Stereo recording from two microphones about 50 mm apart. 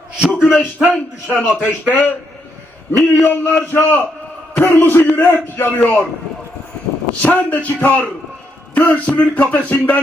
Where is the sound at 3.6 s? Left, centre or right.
Left.